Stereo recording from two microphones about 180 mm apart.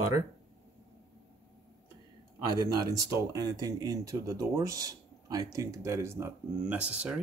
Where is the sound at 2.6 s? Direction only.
20° right (ahead or behind).